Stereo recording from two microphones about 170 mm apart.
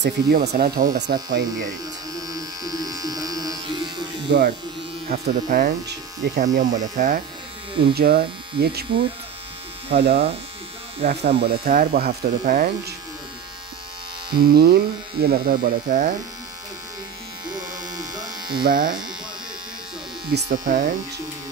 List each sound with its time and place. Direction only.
0.0 s speech: 70° right (ahead or behind); by 1.8 s 55° right (ahead or behind)
2.1 s electric shaver: 20° right (ahead or behind)
4.3 s speech: 70° right (ahead or behind)
5.2 s speech: 60° right (ahead or behind)
6.4 s speech: 45° right (ahead or behind)
7.9 s speech: 65° right (ahead or behind)
9.9 s speech: 75° right (ahead or behind)
14.3 s speech: 65° right (ahead or behind)
17.6 s electric shaver: 25° right (ahead or behind)
18.6 s speech: 60° right (ahead or behind)
20.2 s speech: 80° right
20.5 s speech: 55° right (ahead or behind)